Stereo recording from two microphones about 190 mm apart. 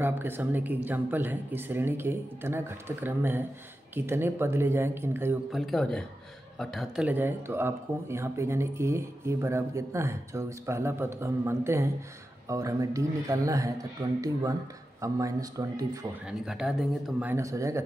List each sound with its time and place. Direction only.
0.0 s speech: 10° right (ahead or behind)
5.5 s speech: centre (ahead or behind); by 16.1 s 20° right (ahead or behind)
16.3 s speech: centre (ahead or behind)